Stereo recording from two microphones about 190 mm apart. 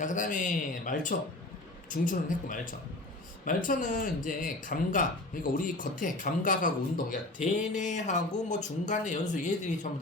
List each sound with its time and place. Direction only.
0.0 s speech: 40° left (ahead or behind)